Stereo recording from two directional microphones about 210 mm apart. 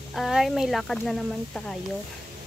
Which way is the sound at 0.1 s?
Centre (ahead or behind).